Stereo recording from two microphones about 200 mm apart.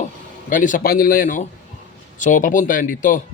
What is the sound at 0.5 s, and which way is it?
Speech, 40° left (ahead or behind).